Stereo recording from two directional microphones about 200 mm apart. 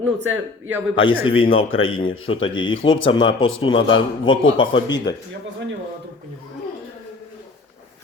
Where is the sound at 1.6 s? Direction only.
90° left.